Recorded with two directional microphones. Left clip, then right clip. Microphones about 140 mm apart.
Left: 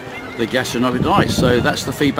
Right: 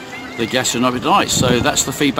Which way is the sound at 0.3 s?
10° right (ahead or behind).